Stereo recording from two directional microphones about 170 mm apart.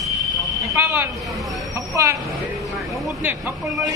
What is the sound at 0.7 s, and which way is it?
Speech, 15° right (ahead or behind).